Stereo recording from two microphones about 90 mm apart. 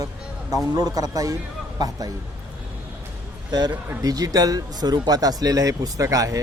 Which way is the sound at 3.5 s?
50° right (ahead or behind).